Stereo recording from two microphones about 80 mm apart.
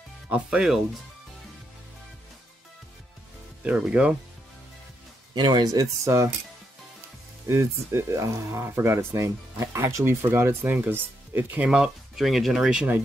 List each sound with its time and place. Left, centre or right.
0.5 s speech: centre
3.6 s speech: centre
5.3 s speech: right
7.4 s speech: right
11.6 s speech: centre